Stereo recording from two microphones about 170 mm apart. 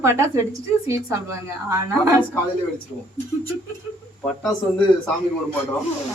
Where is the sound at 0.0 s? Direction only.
15° right (ahead or behind).